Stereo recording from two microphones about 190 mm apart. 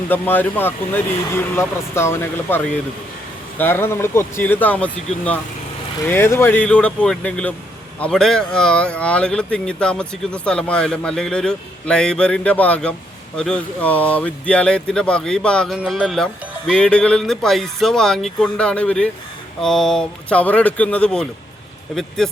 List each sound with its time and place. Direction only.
0.1 s speech: 10° left (ahead or behind)
3.6 s speech: 10° left (ahead or behind)